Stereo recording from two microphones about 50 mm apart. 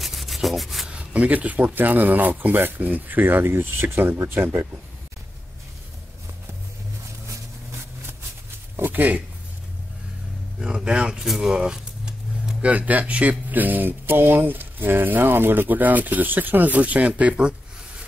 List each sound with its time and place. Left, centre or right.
0.0 s rub: centre
0.8 s speech: right
8.7 s a sound: right
10.6 s speech: centre
11.6 s a sound: centre
12.6 s speech: right